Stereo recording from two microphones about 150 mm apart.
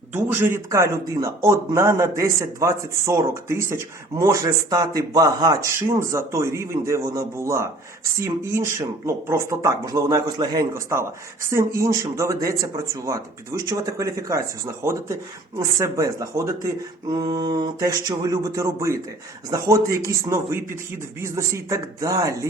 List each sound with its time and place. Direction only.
0.1 s speech: 15° right (ahead or behind)